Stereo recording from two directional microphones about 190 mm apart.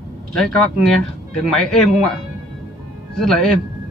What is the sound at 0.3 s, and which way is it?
Speech, centre (ahead or behind).